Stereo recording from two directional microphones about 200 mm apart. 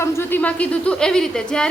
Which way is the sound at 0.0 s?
10° left (ahead or behind).